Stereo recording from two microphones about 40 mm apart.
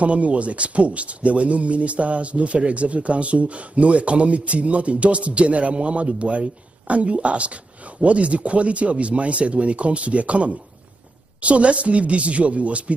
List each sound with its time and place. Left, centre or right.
0.0 s speech: right